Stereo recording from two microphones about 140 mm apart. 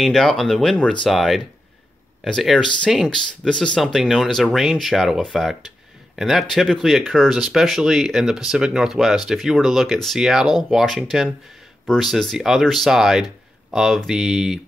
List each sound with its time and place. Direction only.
0.0 s a man's voice: centre (ahead or behind)